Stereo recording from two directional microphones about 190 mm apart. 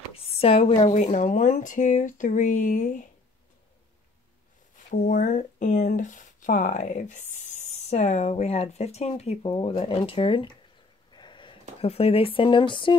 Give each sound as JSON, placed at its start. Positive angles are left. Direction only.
{"t": 0.1, "sound": "speech", "side_deg": 30}
{"t": 4.9, "sound": "speech", "side_deg": 45}
{"t": 11.1, "sound": "a sound", "side_deg": 25}
{"t": 11.8, "sound": "speech", "side_deg": 30}